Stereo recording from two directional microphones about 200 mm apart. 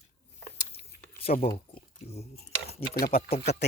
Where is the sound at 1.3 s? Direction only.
40° left (ahead or behind).